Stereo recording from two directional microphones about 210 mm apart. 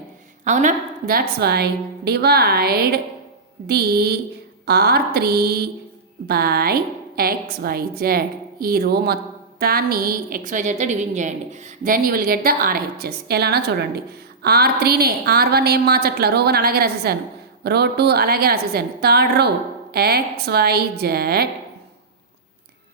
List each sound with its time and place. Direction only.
0.4 s a woman's voice: 35° right (ahead or behind)